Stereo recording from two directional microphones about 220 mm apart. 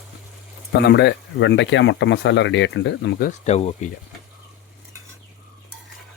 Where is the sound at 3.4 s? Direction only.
30° left (ahead or behind).